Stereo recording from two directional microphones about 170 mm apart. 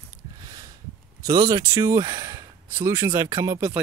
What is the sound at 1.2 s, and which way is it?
Speech, 20° right (ahead or behind).